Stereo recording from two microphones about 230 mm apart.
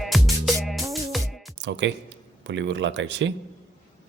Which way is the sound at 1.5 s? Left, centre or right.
Right.